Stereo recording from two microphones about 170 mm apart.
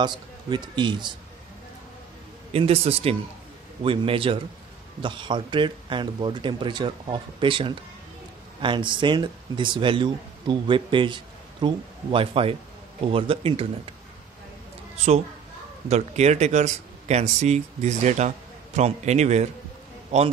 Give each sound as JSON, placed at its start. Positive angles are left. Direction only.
{"t": 0.0, "sound": "speech", "side_deg": -25}
{"t": 2.5, "sound": "speech", "side_deg": -35}
{"t": 15.9, "sound": "speech", "side_deg": -40}